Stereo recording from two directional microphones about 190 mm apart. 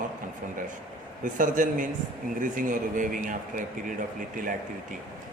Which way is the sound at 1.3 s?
45° right (ahead or behind).